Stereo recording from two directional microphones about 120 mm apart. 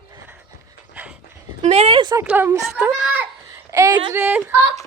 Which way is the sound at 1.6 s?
70° right (ahead or behind).